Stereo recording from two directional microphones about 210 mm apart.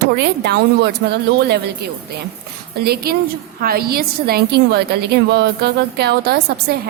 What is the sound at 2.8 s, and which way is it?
A woman's voice, 50° right (ahead or behind).